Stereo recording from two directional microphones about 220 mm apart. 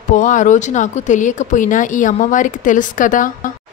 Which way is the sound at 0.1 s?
35° left (ahead or behind).